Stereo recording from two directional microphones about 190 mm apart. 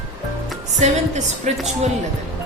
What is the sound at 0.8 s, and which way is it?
Speech, 40° right (ahead or behind).